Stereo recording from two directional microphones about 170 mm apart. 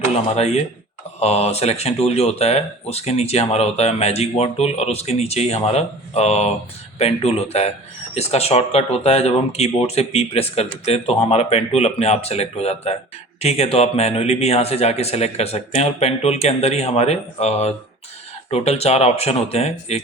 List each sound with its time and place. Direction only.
0.3 s speech: 40° left (ahead or behind)